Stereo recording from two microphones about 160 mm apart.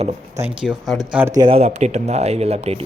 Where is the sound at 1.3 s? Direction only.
30° right (ahead or behind).